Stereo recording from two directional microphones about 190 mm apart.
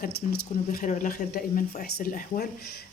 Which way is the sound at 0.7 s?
45° left (ahead or behind).